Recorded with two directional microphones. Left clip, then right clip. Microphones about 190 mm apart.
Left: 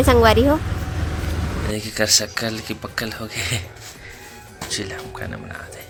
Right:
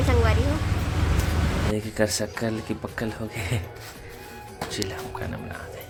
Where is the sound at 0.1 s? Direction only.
45° left (ahead or behind).